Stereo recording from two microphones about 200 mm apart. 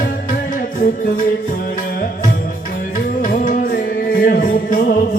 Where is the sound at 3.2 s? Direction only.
45° left (ahead or behind).